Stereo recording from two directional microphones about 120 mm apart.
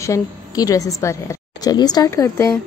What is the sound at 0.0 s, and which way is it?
A woman's voice, 25° left (ahead or behind).